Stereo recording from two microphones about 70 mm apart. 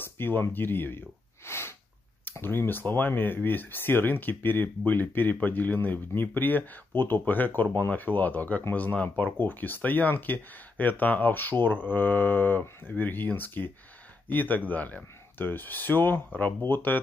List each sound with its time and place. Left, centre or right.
0.0 s speech: left
1.4 s sneeze: left
2.3 s speech: left